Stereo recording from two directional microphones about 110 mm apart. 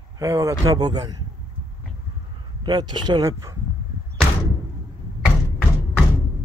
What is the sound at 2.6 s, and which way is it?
Speech, 40° right (ahead or behind).